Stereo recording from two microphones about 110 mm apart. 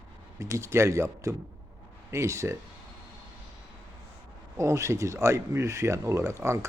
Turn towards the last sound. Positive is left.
turn(degrees=-25)  # may be behind; listen again after turning